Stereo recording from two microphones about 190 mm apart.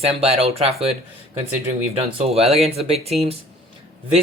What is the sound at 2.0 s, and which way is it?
Speech, 35° right (ahead or behind).